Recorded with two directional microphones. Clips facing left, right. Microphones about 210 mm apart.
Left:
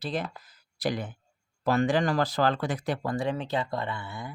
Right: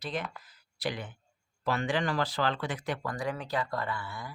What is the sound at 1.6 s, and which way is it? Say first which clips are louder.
Speech: left 6 dB; 40° left (ahead or behind).